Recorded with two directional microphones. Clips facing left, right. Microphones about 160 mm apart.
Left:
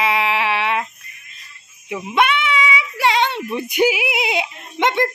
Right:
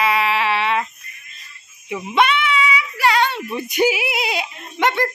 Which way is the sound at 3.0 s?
20° left (ahead or behind).